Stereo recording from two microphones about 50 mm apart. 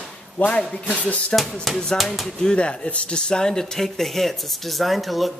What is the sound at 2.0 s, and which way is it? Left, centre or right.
Speech, centre.